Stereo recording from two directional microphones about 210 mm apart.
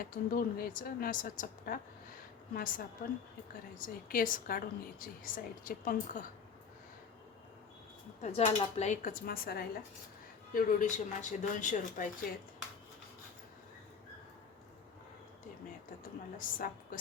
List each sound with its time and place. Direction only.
0.0 s a woman's voice: 40° left (ahead or behind)
8.2 s a woman's voice: 30° left (ahead or behind)
16.4 s a woman's voice: 40° left (ahead or behind)